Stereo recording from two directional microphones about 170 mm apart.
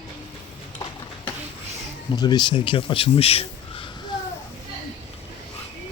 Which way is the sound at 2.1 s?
25° left (ahead or behind).